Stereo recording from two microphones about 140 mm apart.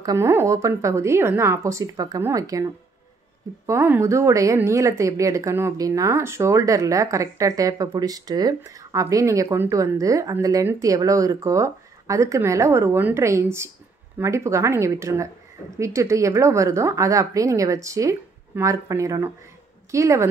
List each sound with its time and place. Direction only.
0.0 s speech: 20° right (ahead or behind)